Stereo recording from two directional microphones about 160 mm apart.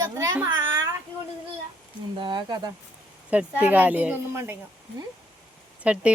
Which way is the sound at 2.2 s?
25° right (ahead or behind).